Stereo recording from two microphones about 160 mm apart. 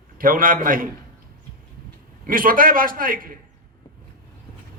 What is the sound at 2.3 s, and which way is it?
A man's voice, 60° right (ahead or behind).